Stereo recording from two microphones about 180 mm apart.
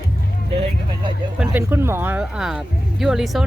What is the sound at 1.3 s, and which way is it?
Speech, 5° right (ahead or behind).